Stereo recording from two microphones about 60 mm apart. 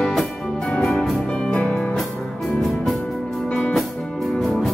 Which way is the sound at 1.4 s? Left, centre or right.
Centre.